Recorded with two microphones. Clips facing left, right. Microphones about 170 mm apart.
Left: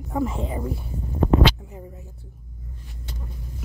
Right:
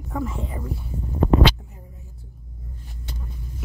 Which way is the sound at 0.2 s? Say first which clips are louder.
Left 6 dB; 20° left (ahead or behind).